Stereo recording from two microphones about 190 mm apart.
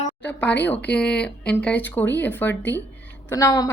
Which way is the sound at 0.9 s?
5° left (ahead or behind).